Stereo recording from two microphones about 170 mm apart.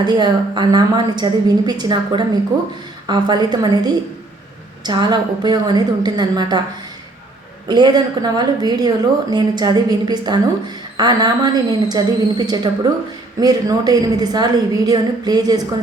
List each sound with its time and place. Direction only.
0.0 s a woman's voice: 25° right (ahead or behind)
7.7 s a woman's voice: 25° right (ahead or behind)